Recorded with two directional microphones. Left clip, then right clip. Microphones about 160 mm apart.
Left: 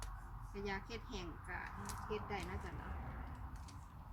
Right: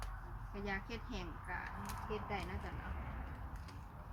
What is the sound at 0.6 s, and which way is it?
A woman's voice, 10° right (ahead or behind).